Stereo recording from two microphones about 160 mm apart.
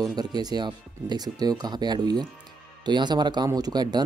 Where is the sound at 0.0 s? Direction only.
25° right (ahead or behind).